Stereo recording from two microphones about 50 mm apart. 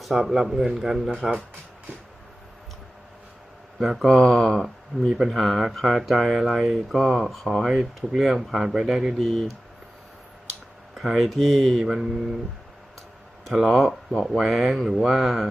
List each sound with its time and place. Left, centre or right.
0.0 s speech: centre
3.8 s speech: centre
4.9 s speech: left
5.3 s speech: centre
9.1 s speech: centre
10.9 s speech: centre
13.4 s speech: centre